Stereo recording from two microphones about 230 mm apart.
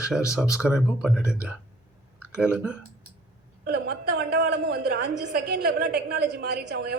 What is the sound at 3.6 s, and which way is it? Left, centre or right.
A woman's voice, right.